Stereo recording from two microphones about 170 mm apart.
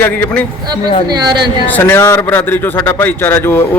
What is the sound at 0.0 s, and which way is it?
Speech, 10° left (ahead or behind).